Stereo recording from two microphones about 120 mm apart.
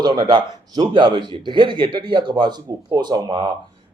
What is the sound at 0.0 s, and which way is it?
Speech, 35° right (ahead or behind).